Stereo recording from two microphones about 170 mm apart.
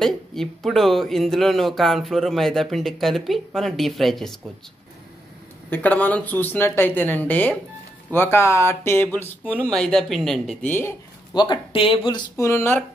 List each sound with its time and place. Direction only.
0.0 s speech: centre (ahead or behind)
5.7 s speech: 10° left (ahead or behind)
11.3 s speech: 25° left (ahead or behind)
12.4 s speech: 15° left (ahead or behind)